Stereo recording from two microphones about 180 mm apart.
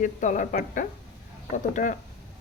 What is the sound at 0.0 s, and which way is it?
A woman's voice, 45° left (ahead or behind).